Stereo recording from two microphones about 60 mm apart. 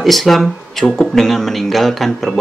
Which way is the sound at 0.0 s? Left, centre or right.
Centre.